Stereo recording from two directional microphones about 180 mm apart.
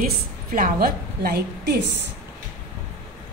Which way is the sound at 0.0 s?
50° right (ahead or behind).